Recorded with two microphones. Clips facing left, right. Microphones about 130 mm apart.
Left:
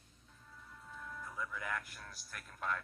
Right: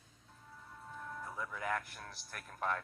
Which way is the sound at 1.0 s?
30° right (ahead or behind).